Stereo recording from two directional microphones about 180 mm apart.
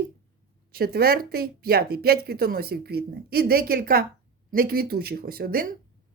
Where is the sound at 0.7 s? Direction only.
60° right (ahead or behind).